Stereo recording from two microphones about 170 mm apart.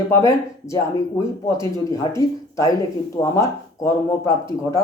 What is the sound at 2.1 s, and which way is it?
Speech, 20° left (ahead or behind).